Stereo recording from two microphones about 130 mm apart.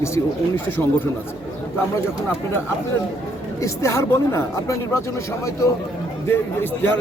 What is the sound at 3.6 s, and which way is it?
Speech, 20° left (ahead or behind).